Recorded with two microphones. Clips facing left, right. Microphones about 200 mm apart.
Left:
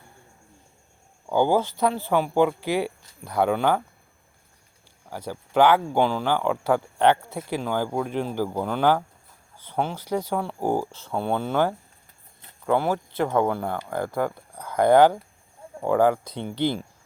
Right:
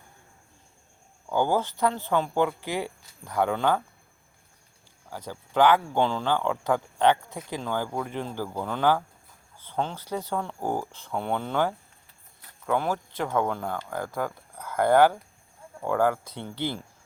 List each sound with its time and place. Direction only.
1.3 s speech: 15° left (ahead or behind)
5.1 s speech: 10° left (ahead or behind)